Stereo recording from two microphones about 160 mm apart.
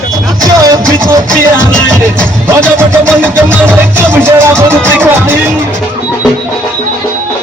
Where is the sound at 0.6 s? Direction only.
20° right (ahead or behind).